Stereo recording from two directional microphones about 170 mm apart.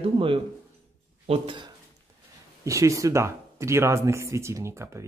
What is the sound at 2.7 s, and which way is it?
Speech, 20° right (ahead or behind).